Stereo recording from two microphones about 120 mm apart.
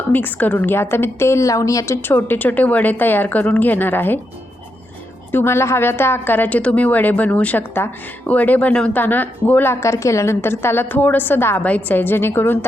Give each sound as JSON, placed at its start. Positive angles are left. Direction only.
{"t": 0.1, "sound": "a woman's voice", "side_deg": 15}
{"t": 5.3, "sound": "a woman's voice", "side_deg": 20}